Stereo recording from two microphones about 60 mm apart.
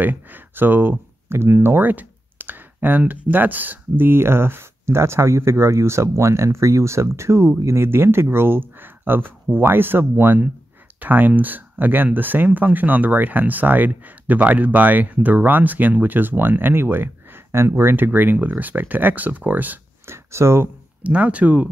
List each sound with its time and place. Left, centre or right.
0.0 s speech: right
1.8 s speech: right
17.9 s speech: right
20.1 s speech: right
21.0 s speech: right